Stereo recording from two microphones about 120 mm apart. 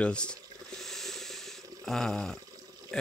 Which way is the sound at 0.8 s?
5° left (ahead or behind).